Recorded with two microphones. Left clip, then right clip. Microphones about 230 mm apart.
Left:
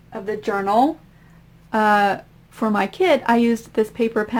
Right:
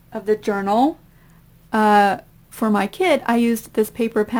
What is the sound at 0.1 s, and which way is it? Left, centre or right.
Speech, right.